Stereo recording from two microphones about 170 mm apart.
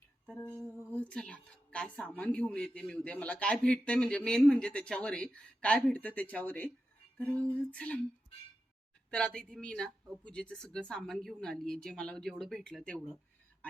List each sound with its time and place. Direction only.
0.3 s a man's voice: 15° left (ahead or behind)
7.7 s a man's voice: 10° left (ahead or behind)
9.0 s speech: 5° left (ahead or behind)